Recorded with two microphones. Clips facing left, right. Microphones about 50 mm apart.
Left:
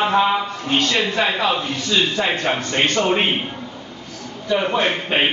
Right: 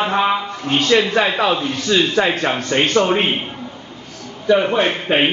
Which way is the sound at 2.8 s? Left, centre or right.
Centre.